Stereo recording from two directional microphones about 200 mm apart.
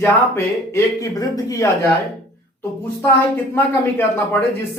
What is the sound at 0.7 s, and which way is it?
Speech, 15° left (ahead or behind).